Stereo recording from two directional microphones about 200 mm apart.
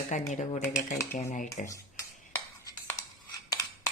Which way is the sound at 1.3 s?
40° left (ahead or behind).